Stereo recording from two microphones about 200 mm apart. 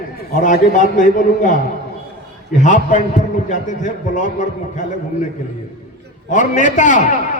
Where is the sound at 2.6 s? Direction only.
40° left (ahead or behind).